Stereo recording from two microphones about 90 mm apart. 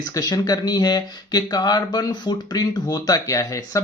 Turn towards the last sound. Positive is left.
turn(degrees=40)  # may be behind; listen again after turning